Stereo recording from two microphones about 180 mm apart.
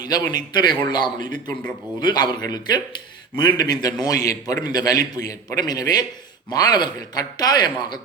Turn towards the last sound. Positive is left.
turn(degrees=25)  # may be behind; listen again after turning